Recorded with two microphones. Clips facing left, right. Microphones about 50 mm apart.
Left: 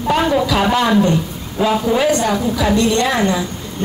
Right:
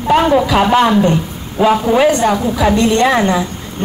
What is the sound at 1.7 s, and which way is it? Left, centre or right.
A woman's voice, right.